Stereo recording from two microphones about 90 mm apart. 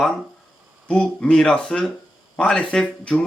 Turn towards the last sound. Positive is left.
turn(degrees=5)  # may be behind; listen again after turning